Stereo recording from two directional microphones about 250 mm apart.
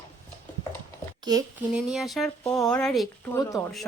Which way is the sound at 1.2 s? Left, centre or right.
Centre.